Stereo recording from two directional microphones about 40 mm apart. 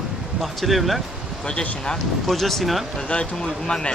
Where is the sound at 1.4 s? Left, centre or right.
Left.